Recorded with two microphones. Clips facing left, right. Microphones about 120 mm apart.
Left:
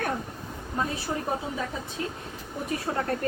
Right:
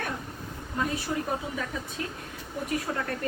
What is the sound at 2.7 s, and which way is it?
Speech, 35° left (ahead or behind).